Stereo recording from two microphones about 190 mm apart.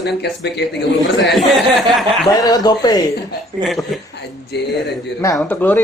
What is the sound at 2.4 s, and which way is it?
Speech, 20° left (ahead or behind).